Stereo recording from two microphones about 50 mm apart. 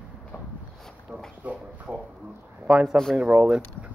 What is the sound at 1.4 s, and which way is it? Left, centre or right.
Speech, right.